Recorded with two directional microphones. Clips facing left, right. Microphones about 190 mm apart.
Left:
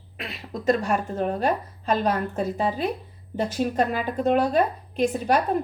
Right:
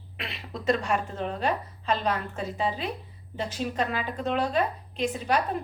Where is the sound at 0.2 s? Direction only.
40° left (ahead or behind).